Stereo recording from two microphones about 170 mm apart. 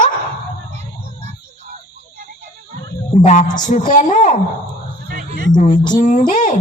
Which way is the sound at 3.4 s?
25° left (ahead or behind).